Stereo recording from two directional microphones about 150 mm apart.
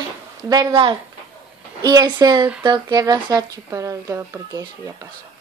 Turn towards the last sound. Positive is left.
turn(degrees=-20)  # may be behind; listen again after turning